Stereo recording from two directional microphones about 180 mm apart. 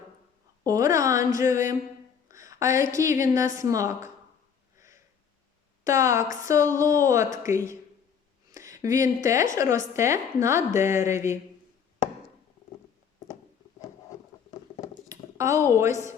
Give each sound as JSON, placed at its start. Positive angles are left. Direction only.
{"t": 0.6, "sound": "a woman's voice", "side_deg": -20}
{"t": 2.2, "sound": "a sound", "side_deg": -15}
{"t": 3.0, "sound": "a woman's voice", "side_deg": -15}
{"t": 5.8, "sound": "a woman's voice", "side_deg": -15}
{"t": 15.1, "sound": "a woman's voice", "side_deg": -15}